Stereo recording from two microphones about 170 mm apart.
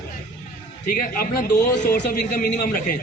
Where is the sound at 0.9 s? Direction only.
60° left (ahead or behind).